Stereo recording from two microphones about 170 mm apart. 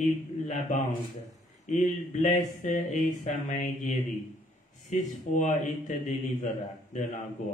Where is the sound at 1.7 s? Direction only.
45° left (ahead or behind).